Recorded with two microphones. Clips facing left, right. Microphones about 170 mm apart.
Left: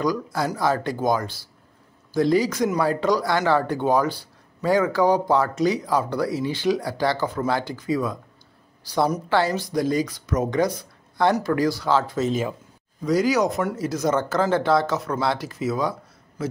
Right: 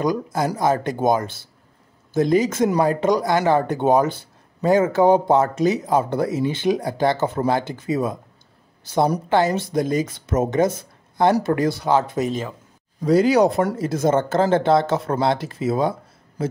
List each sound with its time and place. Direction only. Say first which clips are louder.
0.0 s speech: right 2 dB; 20° right (ahead or behind)
12.3 s speech: left 2 dB; 10° left (ahead or behind)
13.0 s speech: right 5 dB; 30° right (ahead or behind)